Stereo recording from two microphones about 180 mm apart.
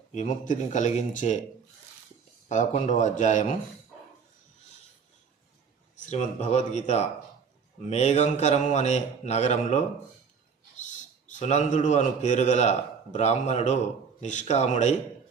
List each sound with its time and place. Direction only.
0.1 s speech: 40° left (ahead or behind)
2.5 s speech: 45° left (ahead or behind)
6.0 s a man's voice: 40° left (ahead or behind)
11.3 s a man's voice: 40° left (ahead or behind)